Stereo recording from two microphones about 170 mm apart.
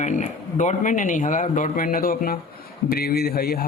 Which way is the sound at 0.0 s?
45° left (ahead or behind).